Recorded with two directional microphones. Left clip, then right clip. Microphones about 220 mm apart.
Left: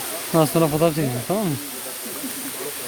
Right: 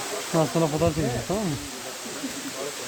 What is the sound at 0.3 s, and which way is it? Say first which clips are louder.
Speech: left 5 dB; 40° left (ahead or behind).